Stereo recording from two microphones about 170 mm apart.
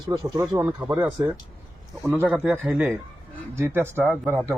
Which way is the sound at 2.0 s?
15° right (ahead or behind).